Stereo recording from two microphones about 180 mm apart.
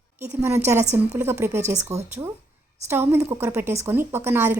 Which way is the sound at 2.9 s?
15° right (ahead or behind).